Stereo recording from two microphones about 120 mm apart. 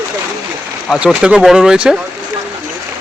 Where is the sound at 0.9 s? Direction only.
10° right (ahead or behind).